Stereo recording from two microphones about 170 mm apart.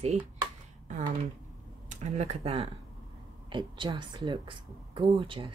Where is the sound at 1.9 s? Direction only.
40° right (ahead or behind).